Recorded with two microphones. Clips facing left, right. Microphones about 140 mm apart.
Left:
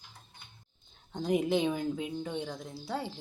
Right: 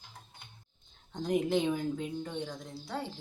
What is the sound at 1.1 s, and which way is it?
Speech, 5° left (ahead or behind).